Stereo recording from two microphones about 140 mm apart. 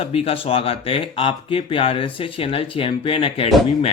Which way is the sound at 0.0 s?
45° left (ahead or behind).